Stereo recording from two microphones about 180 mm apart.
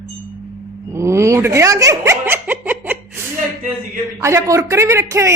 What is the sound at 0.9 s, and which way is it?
Speech, 15° right (ahead or behind).